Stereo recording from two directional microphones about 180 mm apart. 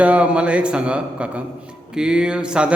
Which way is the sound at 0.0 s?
5° right (ahead or behind).